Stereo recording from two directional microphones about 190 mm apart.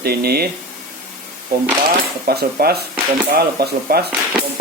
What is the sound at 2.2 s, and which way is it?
Speech, 55° right (ahead or behind).